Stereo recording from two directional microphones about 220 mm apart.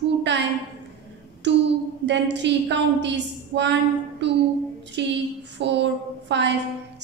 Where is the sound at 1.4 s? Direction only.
55° right (ahead or behind).